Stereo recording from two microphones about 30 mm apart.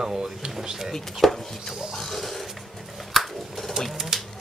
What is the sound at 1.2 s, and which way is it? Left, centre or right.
Speech, centre.